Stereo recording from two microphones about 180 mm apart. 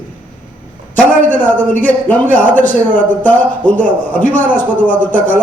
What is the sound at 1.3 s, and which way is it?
A man's voice, 10° left (ahead or behind).